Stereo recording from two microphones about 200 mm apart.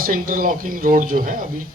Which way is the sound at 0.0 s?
45° right (ahead or behind).